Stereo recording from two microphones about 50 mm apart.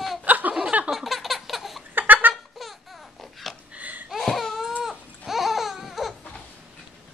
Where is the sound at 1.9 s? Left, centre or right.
Right.